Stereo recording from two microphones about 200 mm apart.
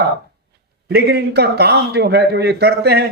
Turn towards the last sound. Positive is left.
turn(degrees=-55)  # may be behind; listen again after turning